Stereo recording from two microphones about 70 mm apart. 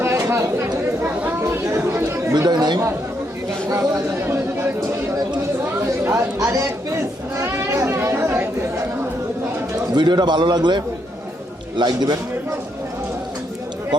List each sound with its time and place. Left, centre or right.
0.0 s chatter: right
2.5 s a man's voice: right
3.7 s chatter: right
6.1 s chatter: right
7.3 s children playing: right
7.9 s chatter: right
9.9 s a man's voice: right